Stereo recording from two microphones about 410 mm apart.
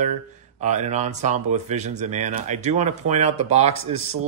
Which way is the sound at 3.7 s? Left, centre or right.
Right.